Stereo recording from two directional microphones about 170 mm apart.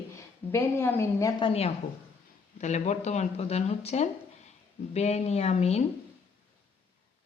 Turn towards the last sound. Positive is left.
turn(degrees=40)  # may be behind; listen again after turning